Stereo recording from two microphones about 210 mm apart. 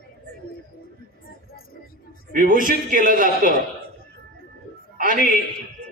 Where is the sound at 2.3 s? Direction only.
40° right (ahead or behind).